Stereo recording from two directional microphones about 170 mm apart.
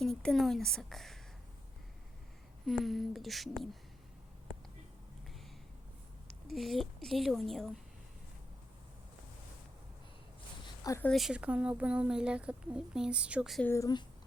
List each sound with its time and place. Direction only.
0.0 s a woman's voice: 5° left (ahead or behind)
2.6 s speech: centre (ahead or behind)
6.5 s speech: centre (ahead or behind)
10.8 s speech: 15° left (ahead or behind)
11.1 s speech: centre (ahead or behind)
13.7 s speech: 20° left (ahead or behind)